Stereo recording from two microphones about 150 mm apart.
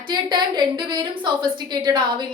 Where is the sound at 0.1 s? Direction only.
30° right (ahead or behind).